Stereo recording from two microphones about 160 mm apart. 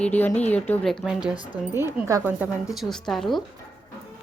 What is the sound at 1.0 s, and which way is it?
Speech, 5° right (ahead or behind).